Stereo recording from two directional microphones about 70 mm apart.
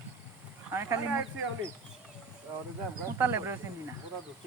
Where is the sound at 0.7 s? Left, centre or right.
Right.